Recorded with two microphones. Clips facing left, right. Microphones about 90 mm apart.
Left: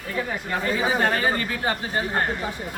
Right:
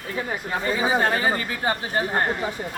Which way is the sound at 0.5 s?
10° right (ahead or behind).